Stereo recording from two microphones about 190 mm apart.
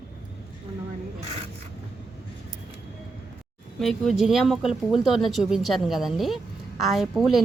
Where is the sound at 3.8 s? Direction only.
Centre (ahead or behind).